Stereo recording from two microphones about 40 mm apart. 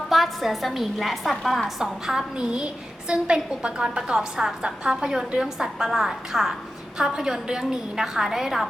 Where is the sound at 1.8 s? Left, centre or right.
Centre.